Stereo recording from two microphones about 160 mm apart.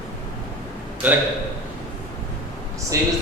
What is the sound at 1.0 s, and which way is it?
Speech, 10° right (ahead or behind).